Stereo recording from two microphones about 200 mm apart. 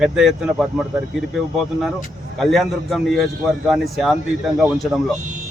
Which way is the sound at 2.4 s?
Centre (ahead or behind).